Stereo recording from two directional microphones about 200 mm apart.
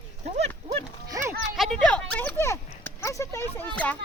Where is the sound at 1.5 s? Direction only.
Centre (ahead or behind).